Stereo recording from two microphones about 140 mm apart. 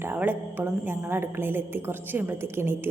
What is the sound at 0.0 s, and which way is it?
A woman's voice, 15° right (ahead or behind).